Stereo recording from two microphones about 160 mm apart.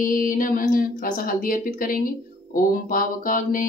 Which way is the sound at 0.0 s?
60° left (ahead or behind).